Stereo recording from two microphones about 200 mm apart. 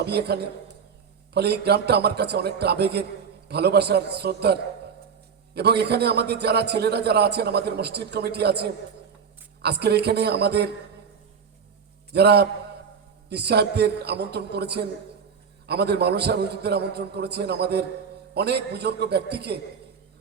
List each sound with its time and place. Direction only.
0.0 s a man's voice: 55° right (ahead or behind)
12.1 s a man's voice: 55° right (ahead or behind)